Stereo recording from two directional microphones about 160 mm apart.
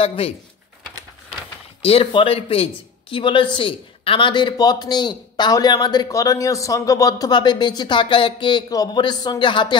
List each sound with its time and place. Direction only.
0.0 s speech: 35° left (ahead or behind)
1.8 s speech: 35° left (ahead or behind)